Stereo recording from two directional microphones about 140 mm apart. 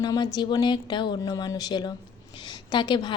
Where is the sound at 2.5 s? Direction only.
30° left (ahead or behind).